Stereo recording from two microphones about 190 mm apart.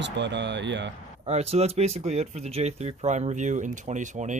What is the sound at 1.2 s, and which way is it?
Speech, 35° right (ahead or behind).